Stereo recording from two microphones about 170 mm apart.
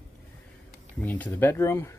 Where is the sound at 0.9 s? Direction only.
10° left (ahead or behind).